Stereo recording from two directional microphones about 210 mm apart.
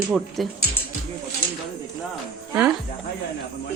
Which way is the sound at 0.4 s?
Centre (ahead or behind).